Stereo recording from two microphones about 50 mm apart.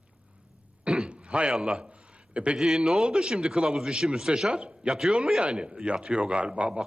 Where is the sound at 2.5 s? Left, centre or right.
Centre.